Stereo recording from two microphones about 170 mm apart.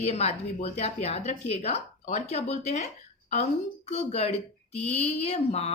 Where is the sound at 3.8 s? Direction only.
40° left (ahead or behind).